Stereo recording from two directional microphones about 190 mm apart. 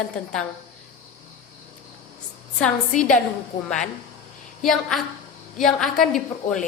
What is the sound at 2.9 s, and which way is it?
Speech, 45° left (ahead or behind).